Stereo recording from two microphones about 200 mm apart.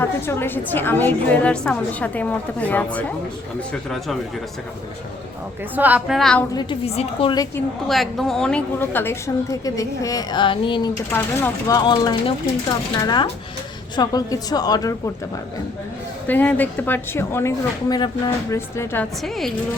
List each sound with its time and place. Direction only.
0.0 s a woman's voice: 10° left (ahead or behind)
5.7 s a woman's voice: 10° right (ahead or behind)
6.5 s a woman's voice: 20° left (ahead or behind)
7.9 s a woman's voice: centre (ahead or behind); by 10.9 s 25° left (ahead or behind)
11.1 s a woman's voice: 10° left (ahead or behind)
16.2 s a woman's voice: 10° left (ahead or behind)
19.2 s a woman's voice: centre (ahead or behind)